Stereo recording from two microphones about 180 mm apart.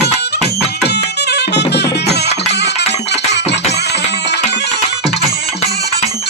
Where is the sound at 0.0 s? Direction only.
65° left (ahead or behind).